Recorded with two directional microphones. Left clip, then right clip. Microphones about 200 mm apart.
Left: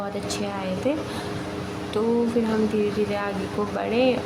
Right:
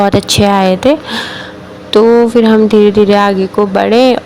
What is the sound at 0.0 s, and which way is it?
Speech, 50° right (ahead or behind).